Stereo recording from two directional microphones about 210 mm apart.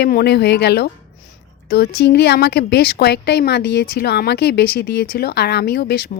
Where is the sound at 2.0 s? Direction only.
50° left (ahead or behind).